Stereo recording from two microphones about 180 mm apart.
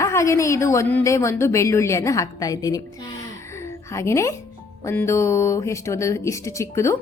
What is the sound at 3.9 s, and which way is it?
A woman's voice, 15° left (ahead or behind).